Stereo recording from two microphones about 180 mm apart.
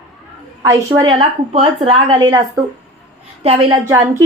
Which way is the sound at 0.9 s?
25° right (ahead or behind).